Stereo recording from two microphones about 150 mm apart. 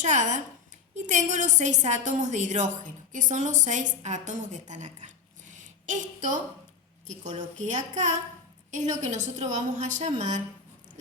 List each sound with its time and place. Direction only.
0.0 s a woman's voice: 55° right (ahead or behind)